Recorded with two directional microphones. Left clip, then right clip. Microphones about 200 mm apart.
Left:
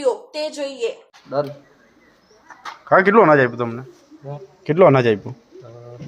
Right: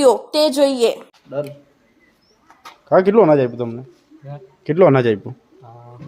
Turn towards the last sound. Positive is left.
turn(degrees=-25)  # may be behind; listen again after turning